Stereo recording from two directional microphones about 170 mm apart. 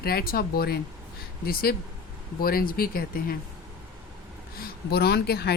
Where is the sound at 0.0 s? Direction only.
65° left (ahead or behind).